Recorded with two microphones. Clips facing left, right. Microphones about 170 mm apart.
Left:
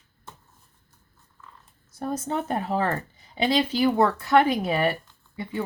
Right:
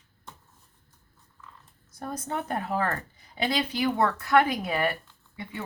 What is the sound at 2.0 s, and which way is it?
Speech, 25° left (ahead or behind).